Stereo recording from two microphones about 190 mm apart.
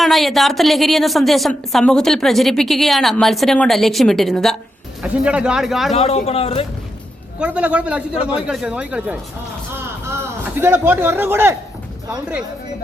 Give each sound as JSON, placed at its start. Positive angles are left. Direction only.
{"t": 0.0, "sound": "a woman's voice", "side_deg": 0}
{"t": 5.9, "sound": "a man's voice", "side_deg": 35}
{"t": 7.3, "sound": "a woman's voice", "side_deg": -5}
{"t": 10.6, "sound": "speech", "side_deg": -10}